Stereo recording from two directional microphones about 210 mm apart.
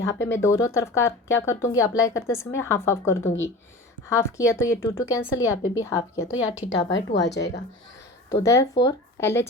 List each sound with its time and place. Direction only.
0.0 s speech: 15° left (ahead or behind)
6.9 s a woman's voice: 55° left (ahead or behind)
8.3 s speech: 15° left (ahead or behind)